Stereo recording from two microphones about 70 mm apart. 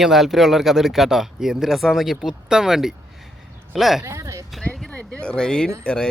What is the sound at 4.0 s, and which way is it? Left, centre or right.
Speech, right.